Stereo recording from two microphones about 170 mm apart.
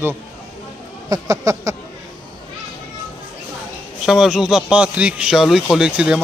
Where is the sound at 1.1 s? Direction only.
20° right (ahead or behind).